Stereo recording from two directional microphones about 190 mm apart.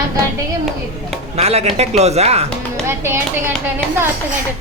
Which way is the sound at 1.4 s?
35° right (ahead or behind).